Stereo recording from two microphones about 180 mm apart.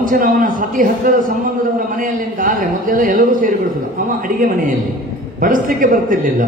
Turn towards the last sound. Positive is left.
turn(degrees=-45)  # may be behind; listen again after turning